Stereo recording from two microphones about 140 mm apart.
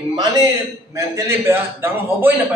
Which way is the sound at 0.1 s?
25° right (ahead or behind).